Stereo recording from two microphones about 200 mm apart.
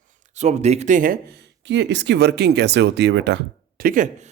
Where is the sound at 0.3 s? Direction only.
35° right (ahead or behind).